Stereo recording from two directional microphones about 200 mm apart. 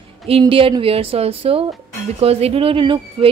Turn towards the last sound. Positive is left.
turn(degrees=-25)  # may be behind; listen again after turning